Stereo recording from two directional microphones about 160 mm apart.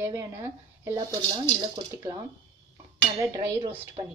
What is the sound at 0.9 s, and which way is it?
Speech, 30° right (ahead or behind).